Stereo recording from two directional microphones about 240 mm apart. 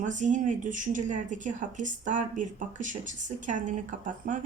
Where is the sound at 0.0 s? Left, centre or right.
Right.